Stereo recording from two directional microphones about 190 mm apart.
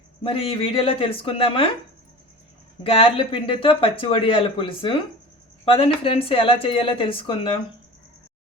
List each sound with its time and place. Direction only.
0.2 s speech: 30° left (ahead or behind)
2.8 s speech: 30° left (ahead or behind)